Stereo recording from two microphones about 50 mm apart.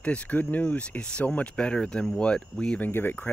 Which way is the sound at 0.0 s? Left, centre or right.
Left.